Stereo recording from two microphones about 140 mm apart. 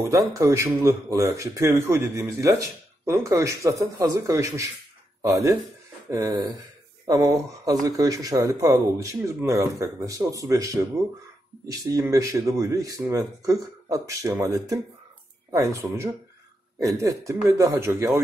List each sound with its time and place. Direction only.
0.0 s a man's voice: 20° right (ahead or behind)